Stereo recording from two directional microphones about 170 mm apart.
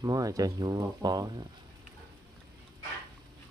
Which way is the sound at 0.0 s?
20° right (ahead or behind).